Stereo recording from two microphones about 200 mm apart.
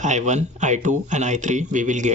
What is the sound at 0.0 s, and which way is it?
Speech, 35° right (ahead or behind).